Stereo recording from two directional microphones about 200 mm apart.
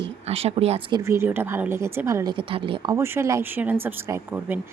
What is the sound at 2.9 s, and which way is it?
Speech, 10° right (ahead or behind).